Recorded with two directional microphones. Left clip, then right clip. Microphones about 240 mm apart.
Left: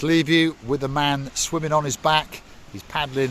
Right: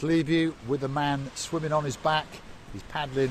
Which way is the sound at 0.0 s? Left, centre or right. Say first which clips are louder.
Left 6 dB; left.